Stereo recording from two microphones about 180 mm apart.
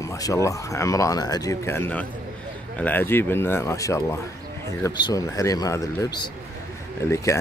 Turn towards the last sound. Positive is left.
turn(degrees=15)  # may be behind; listen again after turning